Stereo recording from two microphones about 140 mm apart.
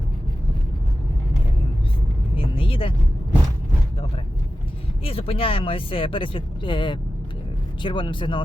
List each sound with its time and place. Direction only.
2.3 s vehicle: 40° left (ahead or behind)
5.0 s speech: 40° left (ahead or behind)